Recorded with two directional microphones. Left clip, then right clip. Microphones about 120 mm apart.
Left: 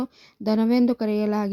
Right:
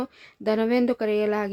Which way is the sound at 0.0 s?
35° left (ahead or behind).